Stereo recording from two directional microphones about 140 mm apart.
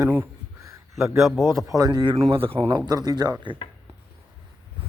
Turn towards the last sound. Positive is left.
turn(degrees=-30)  # may be behind; listen again after turning